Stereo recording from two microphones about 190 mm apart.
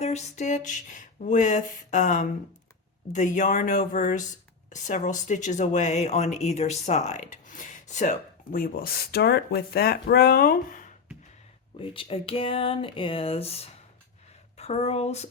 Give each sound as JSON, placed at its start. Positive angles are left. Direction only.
{"t": 0.0, "sound": "speech", "side_deg": 35}
{"t": 8.5, "sound": "speech", "side_deg": 50}
{"t": 11.9, "sound": "speech", "side_deg": 30}